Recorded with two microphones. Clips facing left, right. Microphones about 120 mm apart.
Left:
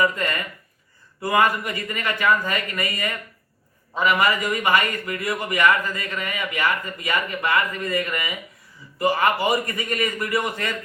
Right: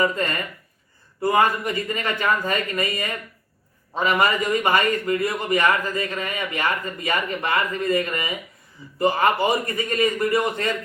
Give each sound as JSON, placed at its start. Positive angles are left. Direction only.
{"t": 0.0, "sound": "a man's voice", "side_deg": -30}